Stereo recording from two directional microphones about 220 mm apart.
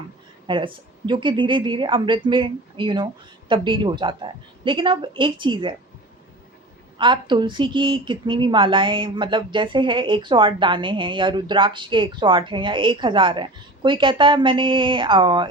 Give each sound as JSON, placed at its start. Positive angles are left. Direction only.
{"t": 0.4, "sound": "a woman's voice", "side_deg": -20}
{"t": 7.0, "sound": "a woman's voice", "side_deg": -20}